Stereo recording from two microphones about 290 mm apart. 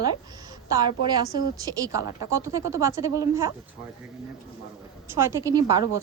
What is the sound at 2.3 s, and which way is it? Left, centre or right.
Speech, centre.